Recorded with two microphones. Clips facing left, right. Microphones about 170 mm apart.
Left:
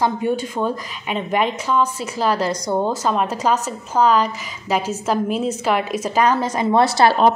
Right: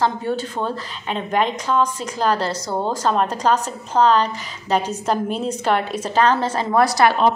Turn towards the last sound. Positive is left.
turn(degrees=25)  # may be behind; listen again after turning